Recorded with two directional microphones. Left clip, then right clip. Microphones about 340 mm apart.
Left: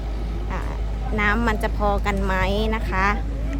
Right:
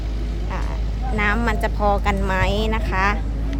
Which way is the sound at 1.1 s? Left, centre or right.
Centre.